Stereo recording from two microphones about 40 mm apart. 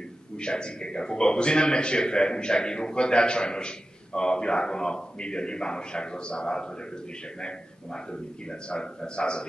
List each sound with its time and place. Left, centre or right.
0.4 s speech: left